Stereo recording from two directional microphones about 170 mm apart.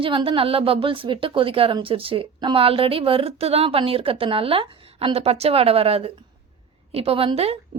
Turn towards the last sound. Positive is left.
turn(degrees=-35)  # may be behind; listen again after turning